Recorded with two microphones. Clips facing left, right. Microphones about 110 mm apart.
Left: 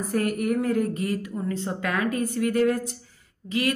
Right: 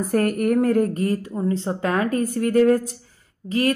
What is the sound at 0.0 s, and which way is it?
Speech, 50° right (ahead or behind).